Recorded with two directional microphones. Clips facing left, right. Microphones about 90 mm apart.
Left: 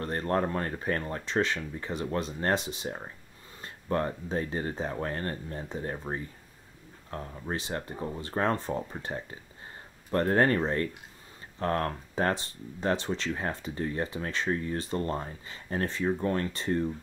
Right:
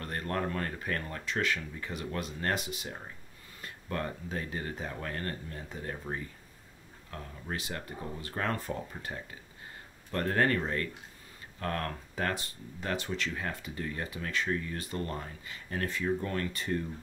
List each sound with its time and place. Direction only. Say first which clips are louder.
0.0 s speech: left 5 dB; 30° left (ahead or behind)